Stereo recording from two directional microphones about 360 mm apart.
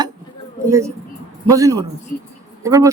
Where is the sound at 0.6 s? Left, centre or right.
Centre.